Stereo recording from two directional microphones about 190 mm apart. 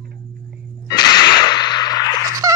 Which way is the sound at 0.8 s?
20° left (ahead or behind).